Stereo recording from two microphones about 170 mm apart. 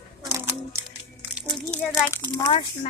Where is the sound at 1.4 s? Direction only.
Centre (ahead or behind).